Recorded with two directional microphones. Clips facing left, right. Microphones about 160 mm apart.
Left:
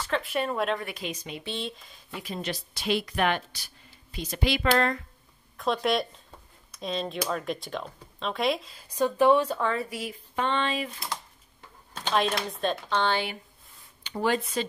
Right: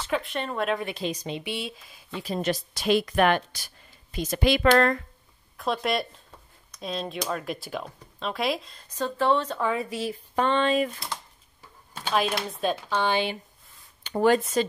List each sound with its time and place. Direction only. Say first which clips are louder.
0.1 s speech: even; 5° left (ahead or behind)
0.7 s a woman's voice: right 5 dB; 25° right (ahead or behind)
1.4 s speech: right 1 dB; 10° right (ahead or behind)
2.2 s speech: right 7 dB; 45° right (ahead or behind)
5.6 s speech: left 1 dB; centre (ahead or behind)
9.8 s a woman's voice: right 3 dB; 25° right (ahead or behind)
10.3 s speech: right 5 dB; 40° right (ahead or behind)
12.0 s speech: even; 5° right (ahead or behind)
14.0 s speech: right 6 dB; 45° right (ahead or behind)